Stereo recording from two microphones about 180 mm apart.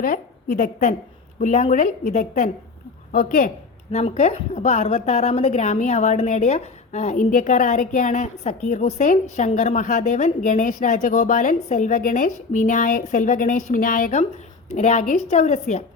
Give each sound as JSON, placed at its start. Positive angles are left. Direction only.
{"t": 0.0, "sound": "a woman's voice", "side_deg": 50}
{"t": 3.9, "sound": "a woman's voice", "side_deg": 35}